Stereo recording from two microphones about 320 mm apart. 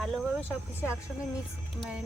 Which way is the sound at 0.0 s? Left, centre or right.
Centre.